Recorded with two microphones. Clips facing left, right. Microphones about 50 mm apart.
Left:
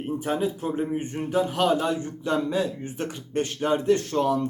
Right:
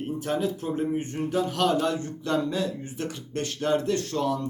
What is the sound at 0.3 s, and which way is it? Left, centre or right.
A man's voice, centre.